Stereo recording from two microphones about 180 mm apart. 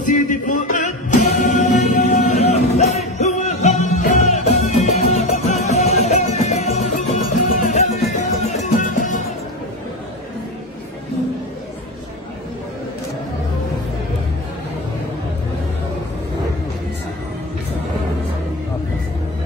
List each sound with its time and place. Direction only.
0.1 s music: 45° left (ahead or behind)